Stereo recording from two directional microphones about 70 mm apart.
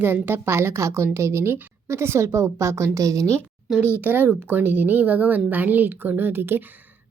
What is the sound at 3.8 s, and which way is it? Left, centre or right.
A woman's voice, right.